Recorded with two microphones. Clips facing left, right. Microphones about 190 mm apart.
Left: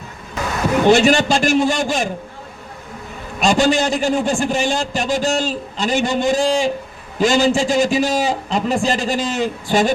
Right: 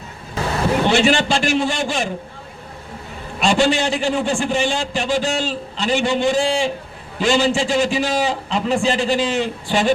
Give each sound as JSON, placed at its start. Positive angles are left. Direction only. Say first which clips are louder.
{"t": 0.9, "sound": "a man's voice", "louder": "left 5 dB", "side_deg": 40}
{"t": 3.4, "sound": "a man's voice", "louder": "left 1 dB", "side_deg": 40}